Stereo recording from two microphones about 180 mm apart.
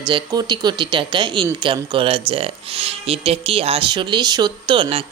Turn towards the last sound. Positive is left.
turn(degrees=-30)  # may be behind; listen again after turning